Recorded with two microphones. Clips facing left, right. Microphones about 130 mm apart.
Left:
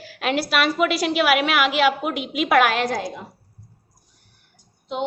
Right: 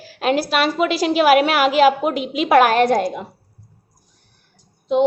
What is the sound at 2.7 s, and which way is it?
Speech, 60° right (ahead or behind).